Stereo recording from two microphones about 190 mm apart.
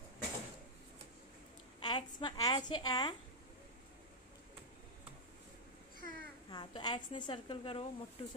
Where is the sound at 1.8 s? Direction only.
25° left (ahead or behind).